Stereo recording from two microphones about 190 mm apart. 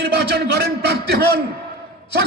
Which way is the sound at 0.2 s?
60° right (ahead or behind).